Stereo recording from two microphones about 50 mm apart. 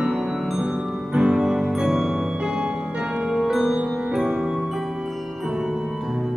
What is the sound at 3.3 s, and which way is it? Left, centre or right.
Music, centre.